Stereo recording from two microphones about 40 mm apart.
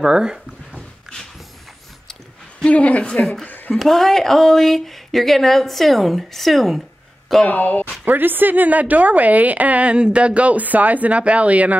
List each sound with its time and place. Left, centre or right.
0.0 s speech: centre
2.6 s a woman's voice: left
3.1 s speech: centre
3.4 s a sound: left
3.7 s speech: centre
7.4 s speech: left
8.0 s speech: right
9.9 s speech: right